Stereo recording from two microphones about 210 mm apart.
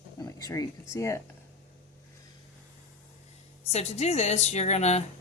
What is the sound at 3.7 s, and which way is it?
A woman's voice, 30° left (ahead or behind).